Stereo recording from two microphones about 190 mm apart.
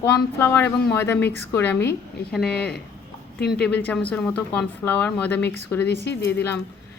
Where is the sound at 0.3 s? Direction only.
10° left (ahead or behind).